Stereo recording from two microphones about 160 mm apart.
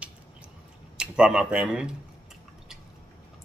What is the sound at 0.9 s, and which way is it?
Speech, 5° right (ahead or behind).